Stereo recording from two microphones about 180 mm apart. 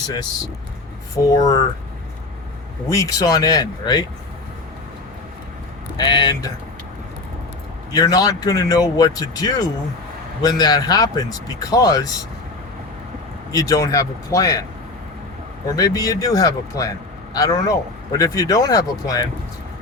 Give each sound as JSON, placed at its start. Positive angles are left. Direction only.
{"t": 0.1, "sound": "speech", "side_deg": 25}
{"t": 2.9, "sound": "speech", "side_deg": 20}
{"t": 6.0, "sound": "speech", "side_deg": 25}
{"t": 7.9, "sound": "speech", "side_deg": 20}
{"t": 13.5, "sound": "speech", "side_deg": 20}
{"t": 15.7, "sound": "speech", "side_deg": 20}